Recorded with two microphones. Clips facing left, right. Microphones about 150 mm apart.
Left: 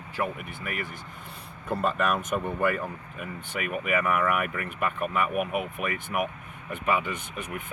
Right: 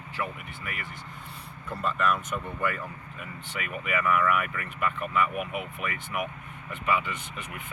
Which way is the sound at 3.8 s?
45° left (ahead or behind).